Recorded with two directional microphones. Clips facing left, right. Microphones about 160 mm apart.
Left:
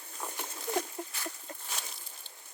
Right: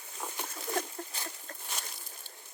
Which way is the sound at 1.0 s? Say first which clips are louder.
Left 2 dB; 10° left (ahead or behind).